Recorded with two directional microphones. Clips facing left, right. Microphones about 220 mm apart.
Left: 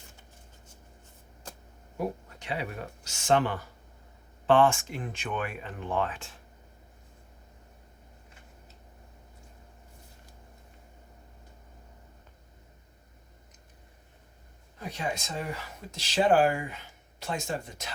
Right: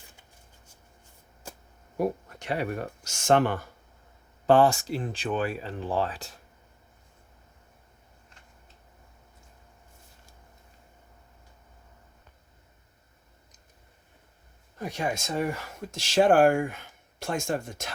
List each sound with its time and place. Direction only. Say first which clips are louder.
2.0 s speech: right 5 dB; 45° right (ahead or behind)
4.4 s speech: right 2 dB; 40° right (ahead or behind)
14.8 s speech: right 4 dB; 45° right (ahead or behind)